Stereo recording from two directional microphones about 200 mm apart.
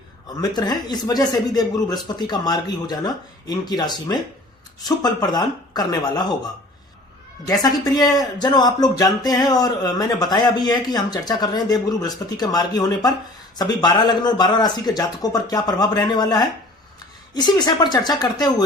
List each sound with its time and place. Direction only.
0.5 s speech: 20° left (ahead or behind)
7.4 s speech: 20° left (ahead or behind)